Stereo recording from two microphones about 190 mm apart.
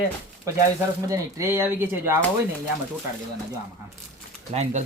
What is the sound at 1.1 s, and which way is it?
Speech, 15° right (ahead or behind).